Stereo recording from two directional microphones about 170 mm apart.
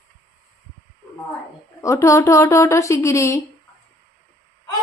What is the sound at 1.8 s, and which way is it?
A woman's voice, 15° left (ahead or behind).